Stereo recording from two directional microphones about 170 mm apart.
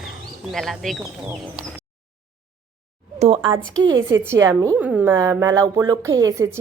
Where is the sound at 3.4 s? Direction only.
25° right (ahead or behind).